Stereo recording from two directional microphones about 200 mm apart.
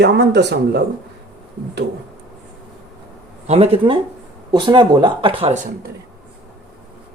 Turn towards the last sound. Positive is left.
turn(degrees=-25)  # may be behind; listen again after turning